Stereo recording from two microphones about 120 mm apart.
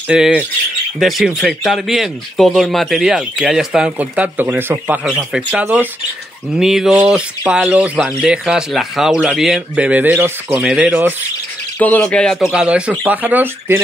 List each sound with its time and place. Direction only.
0.1 s speech: 10° right (ahead or behind)
9.8 s speech: 10° right (ahead or behind)
11.8 s speech: 10° left (ahead or behind); by 13.7 s 15° right (ahead or behind)